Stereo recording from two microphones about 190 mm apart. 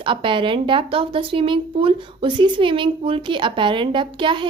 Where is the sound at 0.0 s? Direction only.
25° right (ahead or behind).